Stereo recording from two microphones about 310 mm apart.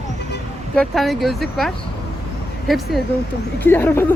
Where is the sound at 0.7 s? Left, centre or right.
Centre.